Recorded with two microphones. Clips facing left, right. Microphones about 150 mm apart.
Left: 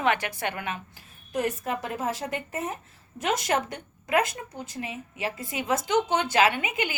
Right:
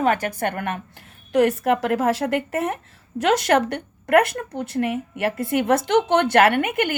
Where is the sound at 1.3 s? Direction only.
70° right (ahead or behind).